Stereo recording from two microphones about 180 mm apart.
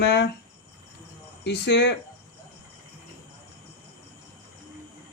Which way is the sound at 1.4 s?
70° left (ahead or behind).